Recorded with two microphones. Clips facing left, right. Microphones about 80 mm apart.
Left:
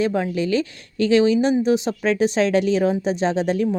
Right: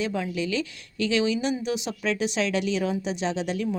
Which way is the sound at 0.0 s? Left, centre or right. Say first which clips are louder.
Left 7 dB; left.